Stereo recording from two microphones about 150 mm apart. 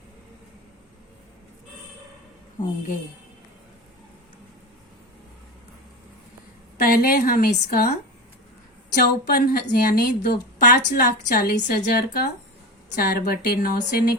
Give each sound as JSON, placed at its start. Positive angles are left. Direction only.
{"t": 6.7, "sound": "speech", "side_deg": 90}
{"t": 9.0, "sound": "speech", "side_deg": 85}
{"t": 10.7, "sound": "a woman's voice", "side_deg": 70}